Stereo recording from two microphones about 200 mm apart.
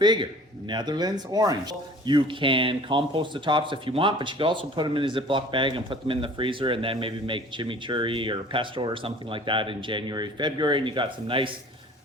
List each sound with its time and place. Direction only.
0.0 s speech: 20° right (ahead or behind)